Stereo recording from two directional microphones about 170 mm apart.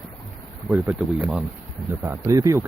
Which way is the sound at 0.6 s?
10° right (ahead or behind).